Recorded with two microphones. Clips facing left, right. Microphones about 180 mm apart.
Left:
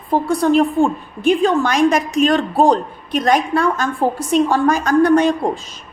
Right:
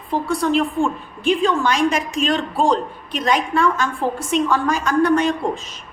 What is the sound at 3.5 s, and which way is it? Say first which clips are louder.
A woman's voice: left 2 dB; 40° left (ahead or behind).